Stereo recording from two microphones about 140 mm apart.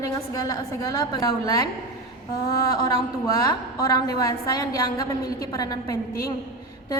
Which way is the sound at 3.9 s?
25° left (ahead or behind).